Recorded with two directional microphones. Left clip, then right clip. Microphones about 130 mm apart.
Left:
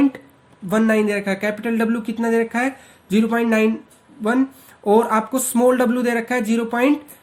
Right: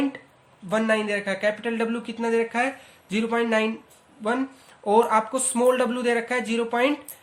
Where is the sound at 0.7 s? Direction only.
40° left (ahead or behind).